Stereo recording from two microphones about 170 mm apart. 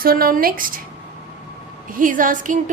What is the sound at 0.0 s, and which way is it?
Speech, 60° right (ahead or behind).